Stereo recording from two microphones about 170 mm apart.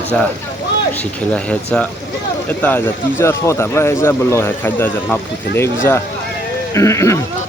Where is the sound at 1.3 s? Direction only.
5° left (ahead or behind).